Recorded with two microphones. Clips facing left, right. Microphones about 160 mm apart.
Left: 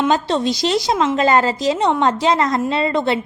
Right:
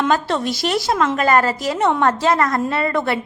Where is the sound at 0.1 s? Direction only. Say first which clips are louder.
Left 2 dB; 20° left (ahead or behind).